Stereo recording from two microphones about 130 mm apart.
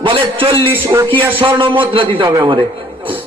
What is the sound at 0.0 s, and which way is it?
A man's voice, 40° right (ahead or behind).